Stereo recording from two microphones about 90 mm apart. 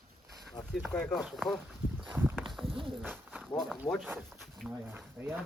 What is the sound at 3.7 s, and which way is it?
Speech, 5° left (ahead or behind).